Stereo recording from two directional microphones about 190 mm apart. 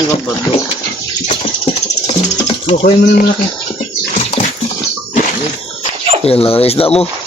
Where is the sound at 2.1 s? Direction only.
35° left (ahead or behind).